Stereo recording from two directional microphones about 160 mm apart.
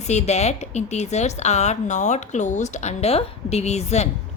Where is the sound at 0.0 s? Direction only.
45° left (ahead or behind).